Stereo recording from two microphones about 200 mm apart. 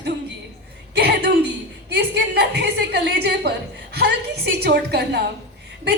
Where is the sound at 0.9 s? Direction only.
55° right (ahead or behind).